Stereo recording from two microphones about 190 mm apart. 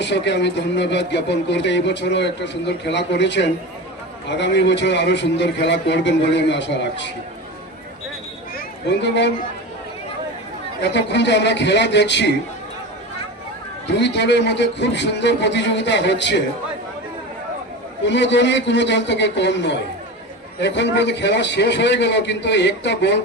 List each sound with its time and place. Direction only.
0.0 s speech: 65° left (ahead or behind)
8.5 s a sound: 65° left (ahead or behind)
10.8 s a man's voice: 65° left (ahead or behind)
13.9 s speech: 65° left (ahead or behind)
18.0 s a man's voice: 65° left (ahead or behind)